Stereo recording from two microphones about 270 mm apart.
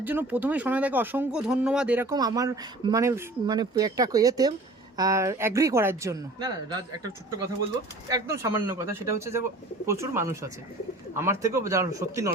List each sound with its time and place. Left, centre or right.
0.0 s speech: centre
8.0 s speech: centre